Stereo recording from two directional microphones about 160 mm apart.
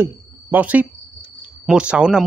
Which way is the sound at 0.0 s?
10° right (ahead or behind).